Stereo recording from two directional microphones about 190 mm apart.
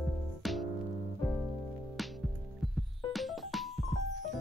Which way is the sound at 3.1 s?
Centre (ahead or behind).